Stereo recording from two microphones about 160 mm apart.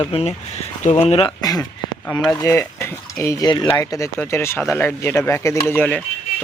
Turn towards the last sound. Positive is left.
turn(degrees=10)  # may be behind; listen again after turning